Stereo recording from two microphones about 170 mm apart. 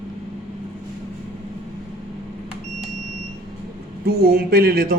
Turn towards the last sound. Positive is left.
turn(degrees=-65)  # may be behind; listen again after turning